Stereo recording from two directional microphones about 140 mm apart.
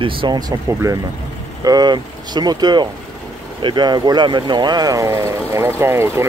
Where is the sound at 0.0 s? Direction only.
40° right (ahead or behind).